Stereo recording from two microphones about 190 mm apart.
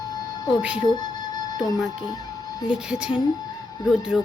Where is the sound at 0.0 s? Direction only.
20° left (ahead or behind).